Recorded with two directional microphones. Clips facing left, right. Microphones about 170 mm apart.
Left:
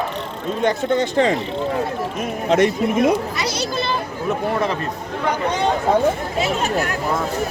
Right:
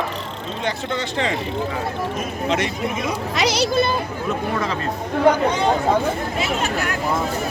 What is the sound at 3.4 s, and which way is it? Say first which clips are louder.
Speech: right 5 dB; 85° right.